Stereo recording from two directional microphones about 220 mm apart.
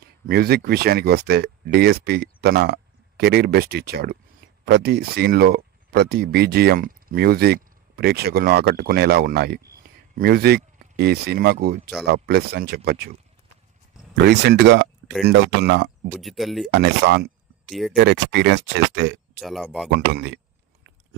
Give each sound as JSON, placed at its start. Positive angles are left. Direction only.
{"t": 0.3, "sound": "speech", "side_deg": -45}
{"t": 14.1, "sound": "speech", "side_deg": -50}
{"t": 16.1, "sound": "speech", "side_deg": 0}
{"t": 16.7, "sound": "speech", "side_deg": -50}
{"t": 17.6, "sound": "speech", "side_deg": 0}
{"t": 17.9, "sound": "speech", "side_deg": -50}
{"t": 19.4, "sound": "speech", "side_deg": 0}
{"t": 19.9, "sound": "speech", "side_deg": -45}